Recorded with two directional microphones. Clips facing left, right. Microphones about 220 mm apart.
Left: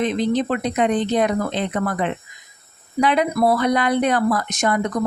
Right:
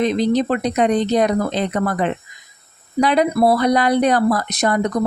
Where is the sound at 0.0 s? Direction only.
40° right (ahead or behind).